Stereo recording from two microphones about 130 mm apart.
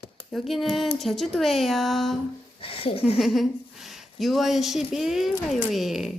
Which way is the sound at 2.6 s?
45° left (ahead or behind).